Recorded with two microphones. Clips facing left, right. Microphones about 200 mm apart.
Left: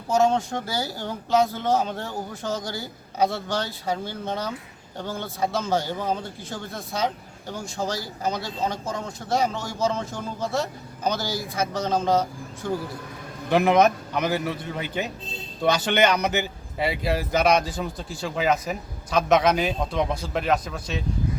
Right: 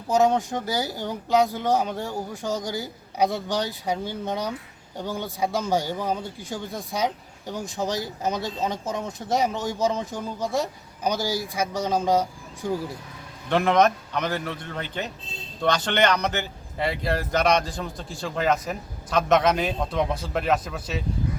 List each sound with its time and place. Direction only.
0.1 s a man's voice: 15° right (ahead or behind)
13.5 s speech: 5° left (ahead or behind)